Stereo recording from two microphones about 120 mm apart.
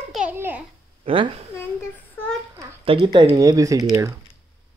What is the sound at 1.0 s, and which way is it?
Speech, 50° right (ahead or behind).